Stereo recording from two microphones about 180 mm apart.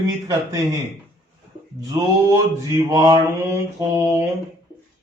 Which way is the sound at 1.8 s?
20° right (ahead or behind).